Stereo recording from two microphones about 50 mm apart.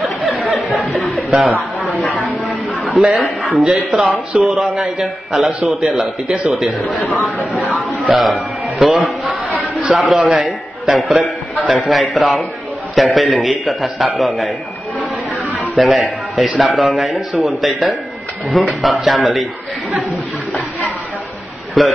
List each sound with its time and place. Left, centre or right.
0.8 s chuckle: centre
2.2 s a sound: centre
2.9 s a man's voice: centre
9.2 s a sound: right
9.8 s a man's voice: centre
15.7 s a man's voice: centre
21.8 s a man's voice: centre